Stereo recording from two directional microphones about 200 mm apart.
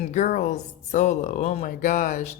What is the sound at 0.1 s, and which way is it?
Speech, 40° left (ahead or behind).